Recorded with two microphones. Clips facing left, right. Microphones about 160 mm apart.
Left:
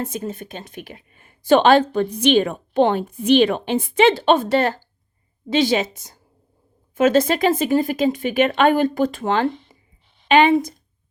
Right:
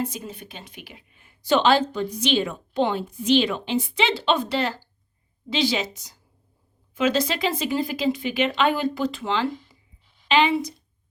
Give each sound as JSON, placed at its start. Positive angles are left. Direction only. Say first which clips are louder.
{"t": 0.0, "sound": "a woman's voice", "louder": "left 3 dB", "side_deg": 50}